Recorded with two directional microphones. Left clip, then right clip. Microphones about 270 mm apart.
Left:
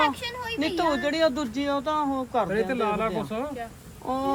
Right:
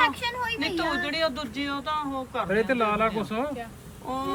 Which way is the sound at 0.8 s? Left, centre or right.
Centre.